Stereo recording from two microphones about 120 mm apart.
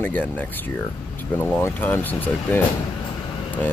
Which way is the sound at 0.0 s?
15° left (ahead or behind).